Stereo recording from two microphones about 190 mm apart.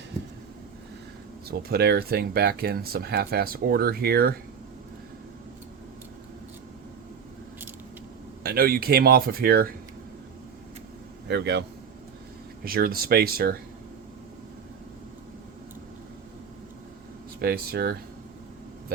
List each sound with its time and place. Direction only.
1.5 s speech: 55° right (ahead or behind)
8.4 s speech: 50° right (ahead or behind)
11.3 s speech: 65° right (ahead or behind)
12.6 s speech: 50° right (ahead or behind)
17.4 s speech: 55° right (ahead or behind)